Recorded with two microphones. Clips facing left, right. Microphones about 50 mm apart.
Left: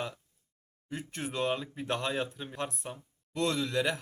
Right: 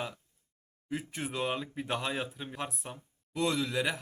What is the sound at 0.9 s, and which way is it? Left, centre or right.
Speech, centre.